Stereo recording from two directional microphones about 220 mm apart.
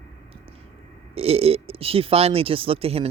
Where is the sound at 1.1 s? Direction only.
25° right (ahead or behind).